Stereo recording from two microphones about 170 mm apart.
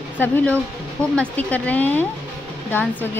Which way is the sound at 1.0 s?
5° left (ahead or behind).